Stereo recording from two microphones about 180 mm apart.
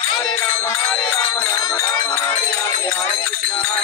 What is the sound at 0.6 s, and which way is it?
Music, 20° left (ahead or behind).